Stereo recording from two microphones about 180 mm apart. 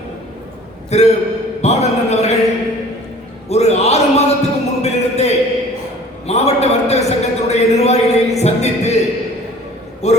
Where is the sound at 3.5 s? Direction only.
35° left (ahead or behind).